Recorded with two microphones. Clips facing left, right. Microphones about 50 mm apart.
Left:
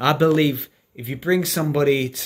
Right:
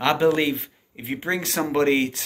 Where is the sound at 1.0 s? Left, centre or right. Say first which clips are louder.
Left 5 dB; right.